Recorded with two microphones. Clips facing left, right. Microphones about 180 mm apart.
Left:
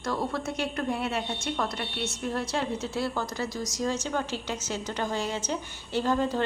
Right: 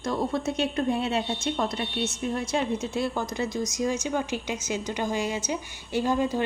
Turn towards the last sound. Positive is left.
turn(degrees=-15)  # may be behind; listen again after turning